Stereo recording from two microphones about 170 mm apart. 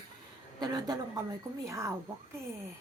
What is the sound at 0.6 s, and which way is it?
A woman's voice, 25° right (ahead or behind).